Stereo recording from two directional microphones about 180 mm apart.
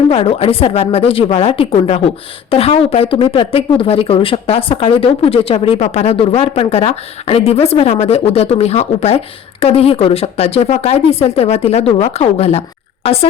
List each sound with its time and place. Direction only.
0.1 s speech: 30° left (ahead or behind)